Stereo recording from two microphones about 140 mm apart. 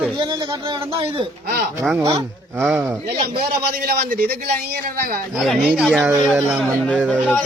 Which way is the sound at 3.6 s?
90° right.